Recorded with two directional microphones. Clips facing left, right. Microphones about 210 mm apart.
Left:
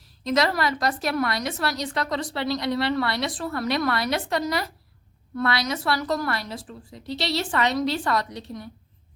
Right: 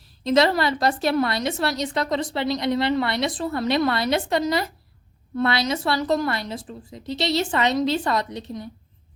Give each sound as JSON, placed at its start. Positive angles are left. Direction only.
{"t": 0.3, "sound": "a woman's voice", "side_deg": -25}